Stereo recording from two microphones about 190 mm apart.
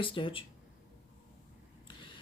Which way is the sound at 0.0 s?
25° left (ahead or behind).